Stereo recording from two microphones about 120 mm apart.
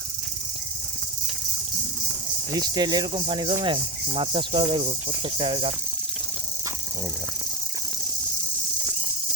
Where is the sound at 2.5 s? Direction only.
35° right (ahead or behind).